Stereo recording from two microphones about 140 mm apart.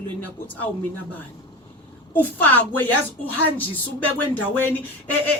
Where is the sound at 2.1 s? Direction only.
10° left (ahead or behind).